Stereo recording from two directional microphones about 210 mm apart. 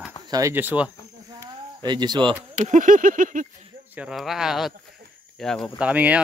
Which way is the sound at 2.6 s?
35° right (ahead or behind).